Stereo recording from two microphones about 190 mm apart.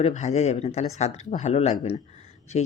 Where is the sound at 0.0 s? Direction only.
35° left (ahead or behind).